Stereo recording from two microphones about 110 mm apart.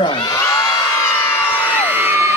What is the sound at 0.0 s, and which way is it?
Crowd, 45° left (ahead or behind).